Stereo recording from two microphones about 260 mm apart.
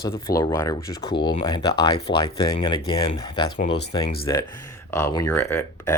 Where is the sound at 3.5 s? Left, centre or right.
Left.